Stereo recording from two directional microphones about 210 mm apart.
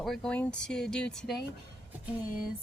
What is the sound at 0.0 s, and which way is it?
Speech, centre (ahead or behind).